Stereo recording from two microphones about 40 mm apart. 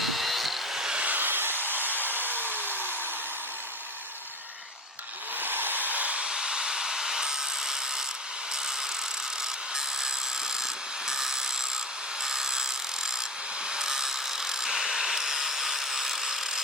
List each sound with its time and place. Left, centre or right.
0.0 s wood: centre
0.9 s a sound: right
1.2 s hair dryer: right
5.4 s a sound: right
6.2 s wood: centre
10.6 s wood: centre
13.7 s tools: centre